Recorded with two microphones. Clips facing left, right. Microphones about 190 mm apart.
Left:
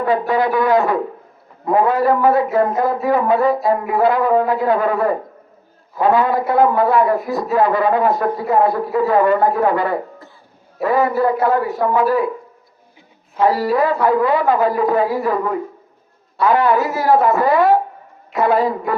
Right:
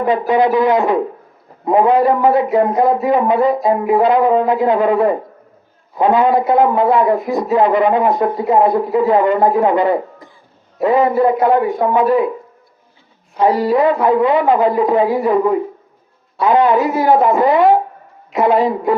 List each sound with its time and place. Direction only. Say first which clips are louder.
0.0 s a man's voice: right 3 dB; 20° right (ahead or behind)
13.4 s a man's voice: right 3 dB; 20° right (ahead or behind)